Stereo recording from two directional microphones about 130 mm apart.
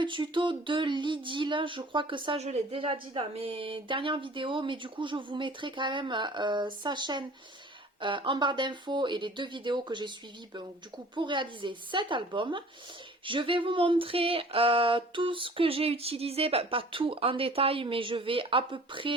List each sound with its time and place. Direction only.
0.0 s speech: 40° right (ahead or behind)
2.4 s speech: 50° right (ahead or behind)
13.2 s a sound: 40° right (ahead or behind)